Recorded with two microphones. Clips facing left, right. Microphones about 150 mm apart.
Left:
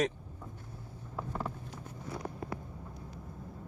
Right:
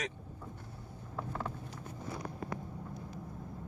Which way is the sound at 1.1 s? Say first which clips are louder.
Left 1 dB; 10° left (ahead or behind).